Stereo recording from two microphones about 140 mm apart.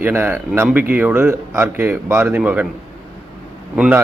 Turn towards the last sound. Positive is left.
turn(degrees=-5)  # may be behind; listen again after turning